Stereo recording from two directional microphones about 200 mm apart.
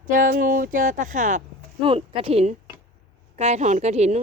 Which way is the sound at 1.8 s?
25° right (ahead or behind).